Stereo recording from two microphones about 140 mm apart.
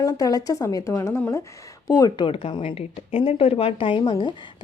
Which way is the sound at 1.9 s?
30° left (ahead or behind).